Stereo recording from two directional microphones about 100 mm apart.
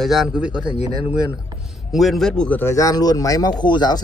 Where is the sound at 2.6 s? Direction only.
30° left (ahead or behind); by 4.0 s 45° left (ahead or behind).